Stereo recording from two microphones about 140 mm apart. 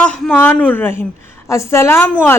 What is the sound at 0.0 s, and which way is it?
A woman's voice, 5° left (ahead or behind).